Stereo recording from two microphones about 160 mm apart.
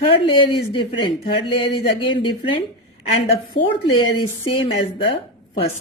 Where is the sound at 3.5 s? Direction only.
30° left (ahead or behind).